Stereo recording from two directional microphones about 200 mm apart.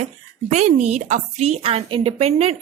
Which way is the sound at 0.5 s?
35° right (ahead or behind).